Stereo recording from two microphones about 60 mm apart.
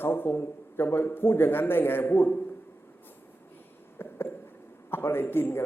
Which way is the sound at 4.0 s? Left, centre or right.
Left.